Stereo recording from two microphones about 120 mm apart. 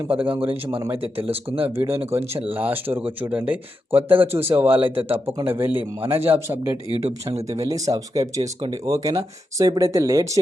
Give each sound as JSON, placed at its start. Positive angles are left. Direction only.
{"t": 0.2, "sound": "a man's voice", "side_deg": -50}
{"t": 1.6, "sound": "speech", "side_deg": -20}